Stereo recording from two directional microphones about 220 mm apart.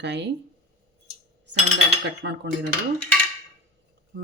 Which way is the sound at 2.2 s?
50° right (ahead or behind).